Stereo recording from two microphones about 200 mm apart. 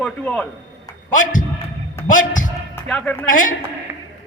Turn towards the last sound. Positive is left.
turn(degrees=40)  # may be behind; listen again after turning